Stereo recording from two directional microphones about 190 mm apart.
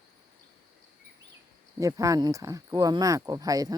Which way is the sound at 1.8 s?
15° right (ahead or behind).